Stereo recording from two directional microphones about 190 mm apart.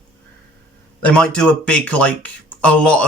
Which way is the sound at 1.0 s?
5° left (ahead or behind).